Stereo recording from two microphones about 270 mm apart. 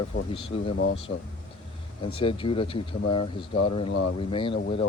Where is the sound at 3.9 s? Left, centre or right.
Left.